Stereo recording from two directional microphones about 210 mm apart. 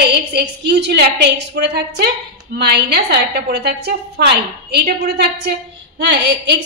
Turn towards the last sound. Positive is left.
turn(degrees=-55)  # may be behind; listen again after turning